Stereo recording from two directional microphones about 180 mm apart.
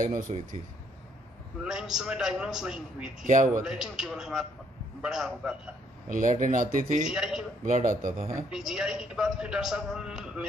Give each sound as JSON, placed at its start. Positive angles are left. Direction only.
{"t": 0.0, "sound": "speech", "side_deg": -45}
{"t": 1.6, "sound": "a man's voice", "side_deg": -5}
{"t": 6.0, "sound": "speech", "side_deg": -45}
{"t": 7.1, "sound": "a man's voice", "side_deg": -5}
{"t": 7.6, "sound": "speech", "side_deg": -45}
{"t": 8.5, "sound": "a man's voice", "side_deg": -5}